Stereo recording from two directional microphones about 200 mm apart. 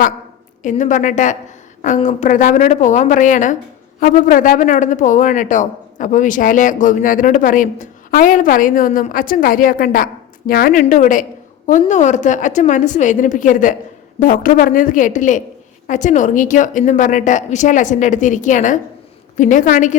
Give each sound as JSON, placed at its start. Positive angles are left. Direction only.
{"t": 0.6, "sound": "a man's voice", "side_deg": 40}